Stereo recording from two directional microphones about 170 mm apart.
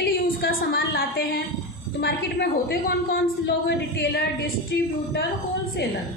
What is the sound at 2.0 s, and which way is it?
A woman's voice, 80° left.